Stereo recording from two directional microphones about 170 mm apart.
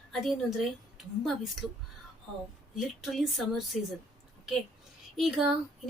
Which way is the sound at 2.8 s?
Centre (ahead or behind).